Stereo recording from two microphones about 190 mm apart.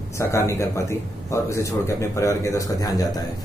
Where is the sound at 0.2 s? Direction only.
15° left (ahead or behind).